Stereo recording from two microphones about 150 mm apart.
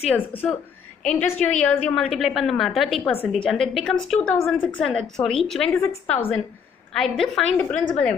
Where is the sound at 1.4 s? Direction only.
5° left (ahead or behind).